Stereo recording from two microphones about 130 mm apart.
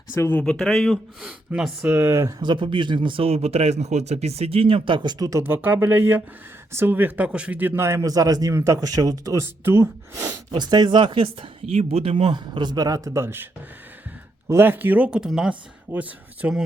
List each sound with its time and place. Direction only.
0.1 s speech: 15° left (ahead or behind)
0.6 s speech: 5° left (ahead or behind)
1.5 s speech: 10° right (ahead or behind)
2.4 s a man's voice: 40° right (ahead or behind)
10.6 s speech: 35° right (ahead or behind)
11.7 s speech: 55° right (ahead or behind); by 16.6 s 10° right (ahead or behind)